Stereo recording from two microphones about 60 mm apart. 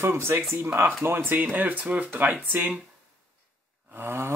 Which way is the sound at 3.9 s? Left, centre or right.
Right.